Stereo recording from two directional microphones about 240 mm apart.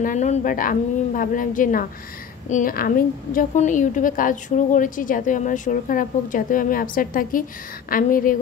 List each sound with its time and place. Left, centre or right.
0.0 s a woman's voice: left